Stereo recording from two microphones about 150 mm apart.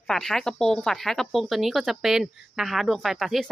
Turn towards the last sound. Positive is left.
turn(degrees=0)  # may be behind; listen again after turning